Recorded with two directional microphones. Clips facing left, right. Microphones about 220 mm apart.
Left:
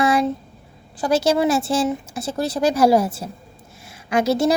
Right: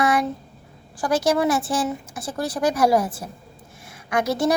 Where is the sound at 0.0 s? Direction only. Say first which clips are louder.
Left 3 dB; 25° left (ahead or behind).